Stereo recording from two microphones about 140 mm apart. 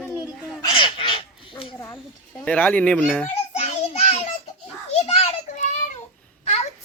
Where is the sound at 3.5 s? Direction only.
50° left (ahead or behind).